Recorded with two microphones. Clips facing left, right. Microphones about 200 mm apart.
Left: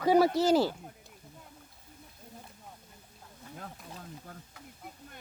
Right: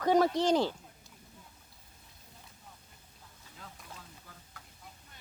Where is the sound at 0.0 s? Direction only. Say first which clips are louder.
Left 2 dB; 10° left (ahead or behind).